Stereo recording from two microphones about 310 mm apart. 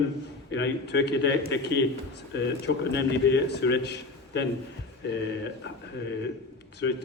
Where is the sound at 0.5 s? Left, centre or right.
Left.